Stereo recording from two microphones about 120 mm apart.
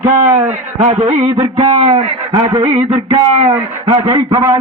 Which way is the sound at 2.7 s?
65° right (ahead or behind).